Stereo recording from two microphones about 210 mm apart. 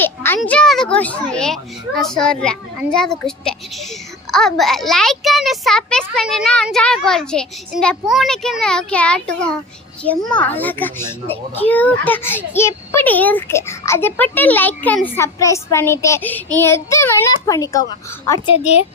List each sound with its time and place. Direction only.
0.0 s a child's voice: 10° left (ahead or behind)
18.3 s a child's voice: 25° left (ahead or behind)